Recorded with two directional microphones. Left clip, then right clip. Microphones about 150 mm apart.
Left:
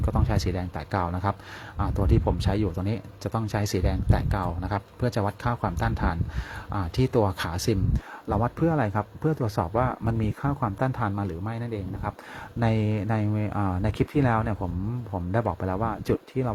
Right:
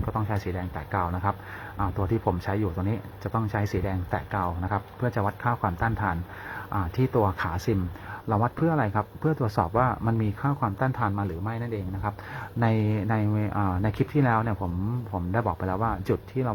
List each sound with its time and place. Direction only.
0.0 s speech: 30° left (ahead or behind)
2.5 s speech: 35° left (ahead or behind)
3.8 s speech: 35° left (ahead or behind)
9.3 s speech: 20° left (ahead or behind)